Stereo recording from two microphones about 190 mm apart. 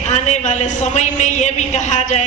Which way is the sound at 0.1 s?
35° left (ahead or behind).